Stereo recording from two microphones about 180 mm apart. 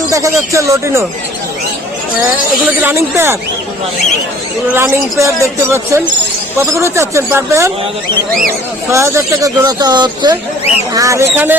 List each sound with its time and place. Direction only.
0.1 s speech: 15° right (ahead or behind)
2.6 s speech: 15° right (ahead or behind)
4.7 s speech: 15° right (ahead or behind)
8.9 s speech: 15° right (ahead or behind)